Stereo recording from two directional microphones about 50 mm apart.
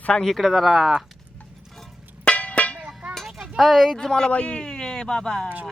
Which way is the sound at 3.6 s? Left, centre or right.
Centre.